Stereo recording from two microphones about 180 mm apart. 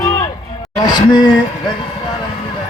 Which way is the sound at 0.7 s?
20° left (ahead or behind).